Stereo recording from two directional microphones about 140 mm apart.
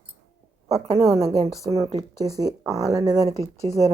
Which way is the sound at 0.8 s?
45° right (ahead or behind).